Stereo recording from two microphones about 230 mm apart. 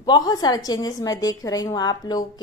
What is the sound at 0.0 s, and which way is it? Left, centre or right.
A woman's voice, centre.